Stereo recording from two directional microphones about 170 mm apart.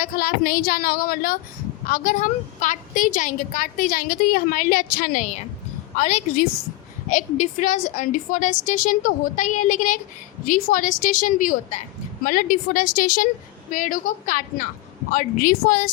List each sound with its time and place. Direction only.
0.0 s a woman's voice: 55° left (ahead or behind)